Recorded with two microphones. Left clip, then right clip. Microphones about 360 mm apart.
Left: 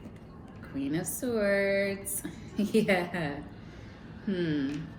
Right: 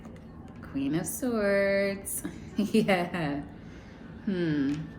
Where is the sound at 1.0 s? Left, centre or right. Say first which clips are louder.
Left 1 dB; right.